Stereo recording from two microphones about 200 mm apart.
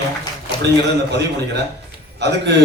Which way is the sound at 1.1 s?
60° right (ahead or behind).